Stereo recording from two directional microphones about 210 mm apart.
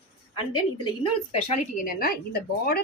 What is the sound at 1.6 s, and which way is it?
A woman's voice, 40° left (ahead or behind).